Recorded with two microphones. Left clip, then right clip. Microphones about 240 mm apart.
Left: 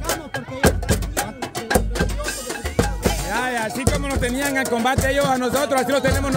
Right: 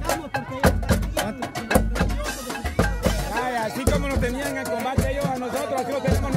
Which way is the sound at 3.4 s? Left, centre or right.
Centre.